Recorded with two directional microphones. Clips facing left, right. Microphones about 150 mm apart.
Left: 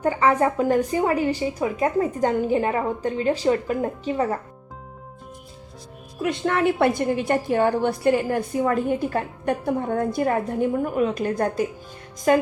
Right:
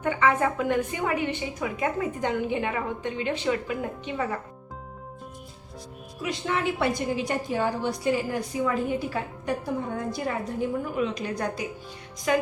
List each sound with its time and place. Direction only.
0.0 s a woman's voice: 40° left (ahead or behind)
6.2 s a woman's voice: 55° left (ahead or behind)